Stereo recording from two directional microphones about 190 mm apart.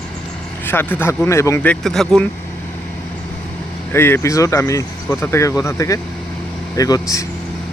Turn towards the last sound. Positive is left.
turn(degrees=20)  # may be behind; listen again after turning